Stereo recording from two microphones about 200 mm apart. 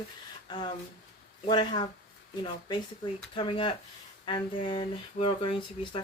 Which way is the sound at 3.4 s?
25° left (ahead or behind).